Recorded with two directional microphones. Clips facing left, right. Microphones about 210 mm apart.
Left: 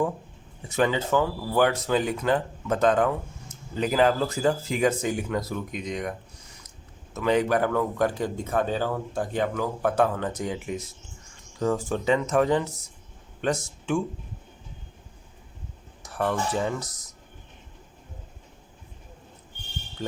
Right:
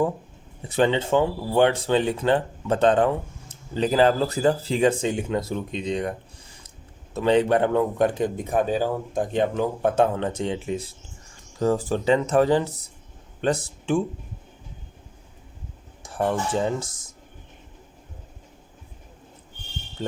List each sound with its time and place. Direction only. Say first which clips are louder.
0.7 s speech: right 3 dB; 30° right (ahead or behind)
16.0 s speech: right 2 dB; 30° right (ahead or behind)